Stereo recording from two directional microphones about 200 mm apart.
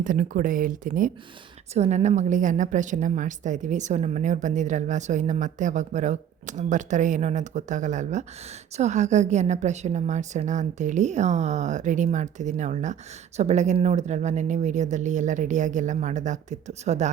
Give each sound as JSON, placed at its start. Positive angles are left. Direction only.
{"t": 0.0, "sound": "a woman's voice", "side_deg": -45}